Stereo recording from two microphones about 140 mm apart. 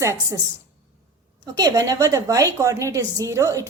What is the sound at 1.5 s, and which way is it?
A woman's voice, 25° right (ahead or behind).